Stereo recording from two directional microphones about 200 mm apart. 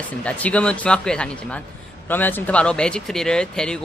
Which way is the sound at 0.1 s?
5° left (ahead or behind).